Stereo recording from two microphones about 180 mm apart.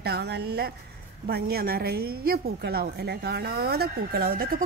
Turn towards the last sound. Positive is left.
turn(degrees=-55)  # may be behind; listen again after turning